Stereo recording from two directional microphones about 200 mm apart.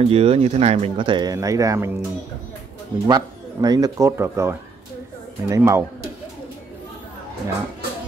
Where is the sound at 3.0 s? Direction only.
20° right (ahead or behind).